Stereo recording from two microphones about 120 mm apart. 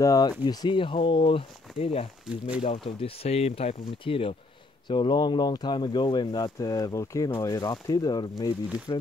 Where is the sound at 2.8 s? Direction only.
55° left (ahead or behind).